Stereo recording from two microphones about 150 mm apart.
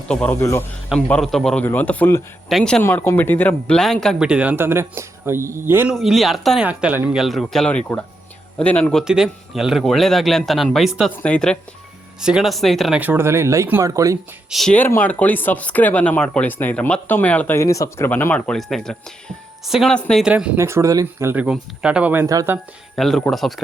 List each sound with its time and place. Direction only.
0.1 s speech: 10° left (ahead or behind)
0.3 s speech: 20° left (ahead or behind)
1.2 s speech: centre (ahead or behind)
2.5 s speech: centre (ahead or behind)
2.8 s speech: 15° left (ahead or behind); by 5.9 s 15° right (ahead or behind)
5.9 s speech: centre (ahead or behind)
6.7 s speech: 10° right (ahead or behind)
7.2 s speech: centre (ahead or behind)
13.0 s speech: 15° right (ahead or behind)
14.5 s speech: centre (ahead or behind)
14.8 s speech: 15° left (ahead or behind)
20.2 s speech: 5° right (ahead or behind)
20.6 s speech: 20° right (ahead or behind)
23.0 s speech: centre (ahead or behind)